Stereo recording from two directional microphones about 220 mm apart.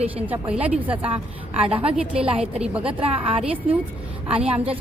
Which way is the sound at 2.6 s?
5° right (ahead or behind).